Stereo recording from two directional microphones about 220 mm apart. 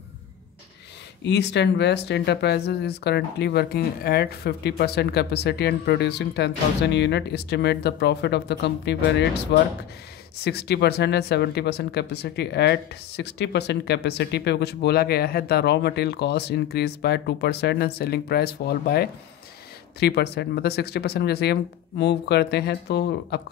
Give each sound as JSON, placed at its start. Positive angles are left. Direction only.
{"t": 1.2, "sound": "speech", "side_deg": 50}